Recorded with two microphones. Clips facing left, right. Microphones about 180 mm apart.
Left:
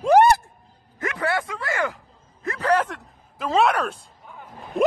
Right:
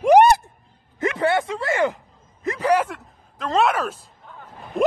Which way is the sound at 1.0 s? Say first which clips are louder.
Right 5 dB; 25° right (ahead or behind).